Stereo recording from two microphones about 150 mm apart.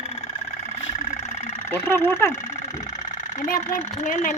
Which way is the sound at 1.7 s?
15° left (ahead or behind).